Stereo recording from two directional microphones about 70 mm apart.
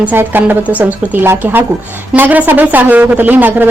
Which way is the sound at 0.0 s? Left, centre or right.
Right.